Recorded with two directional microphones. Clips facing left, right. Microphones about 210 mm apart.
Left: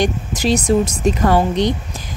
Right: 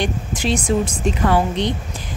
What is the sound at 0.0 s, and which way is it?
A woman's voice, 40° left (ahead or behind).